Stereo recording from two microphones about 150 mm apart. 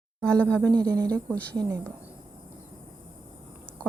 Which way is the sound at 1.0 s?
25° right (ahead or behind).